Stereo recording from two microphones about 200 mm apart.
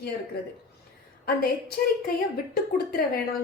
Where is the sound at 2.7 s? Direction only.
50° left (ahead or behind).